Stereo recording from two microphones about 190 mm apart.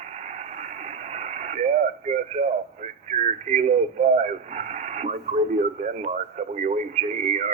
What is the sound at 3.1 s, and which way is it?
Speech, 40° right (ahead or behind).